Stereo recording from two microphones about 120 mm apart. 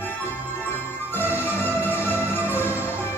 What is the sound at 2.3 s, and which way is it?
Music, 20° left (ahead or behind).